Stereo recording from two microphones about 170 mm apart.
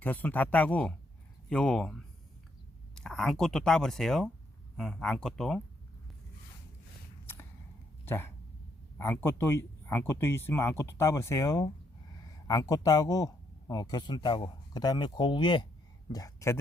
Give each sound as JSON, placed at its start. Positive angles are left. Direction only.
{"t": 0.0, "sound": "speech", "side_deg": 10}
{"t": 7.3, "sound": "a sound", "side_deg": 10}
{"t": 8.0, "sound": "speech", "side_deg": 15}